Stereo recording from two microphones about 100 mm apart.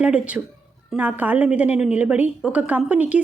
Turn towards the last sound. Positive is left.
turn(degrees=-15)  # may be behind; listen again after turning